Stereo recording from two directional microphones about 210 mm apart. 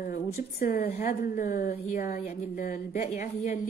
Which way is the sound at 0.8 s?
35° left (ahead or behind).